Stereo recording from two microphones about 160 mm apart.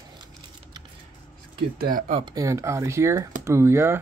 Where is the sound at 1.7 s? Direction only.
65° right (ahead or behind).